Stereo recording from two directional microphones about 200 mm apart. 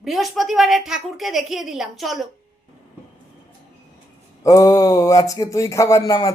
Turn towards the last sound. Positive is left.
turn(degrees=15)  # may be behind; listen again after turning